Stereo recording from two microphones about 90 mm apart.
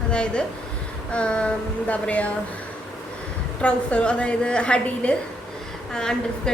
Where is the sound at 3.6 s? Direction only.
10° left (ahead or behind).